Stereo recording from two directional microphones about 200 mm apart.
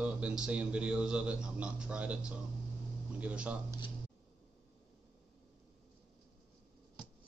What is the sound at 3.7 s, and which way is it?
Speech, 25° left (ahead or behind).